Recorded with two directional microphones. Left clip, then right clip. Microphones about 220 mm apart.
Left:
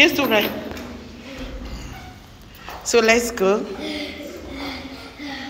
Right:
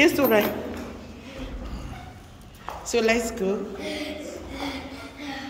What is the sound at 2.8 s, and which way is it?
Speech, 5° right (ahead or behind).